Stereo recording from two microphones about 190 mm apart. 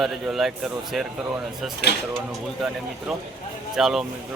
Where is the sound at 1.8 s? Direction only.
60° left (ahead or behind).